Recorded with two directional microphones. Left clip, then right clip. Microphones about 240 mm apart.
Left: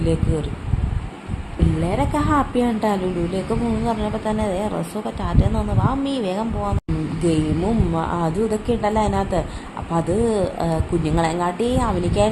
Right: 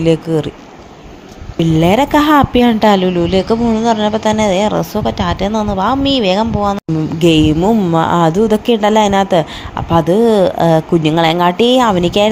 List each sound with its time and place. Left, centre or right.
0.0 s speech: right
1.5 s speech: right